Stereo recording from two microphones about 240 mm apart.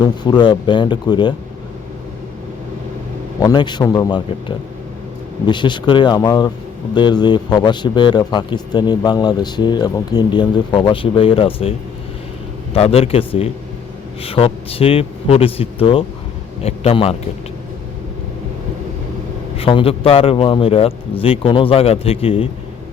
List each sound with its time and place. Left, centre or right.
0.0 s a man's voice: centre
3.4 s a man's voice: centre
12.7 s a man's voice: left
19.5 s a man's voice: left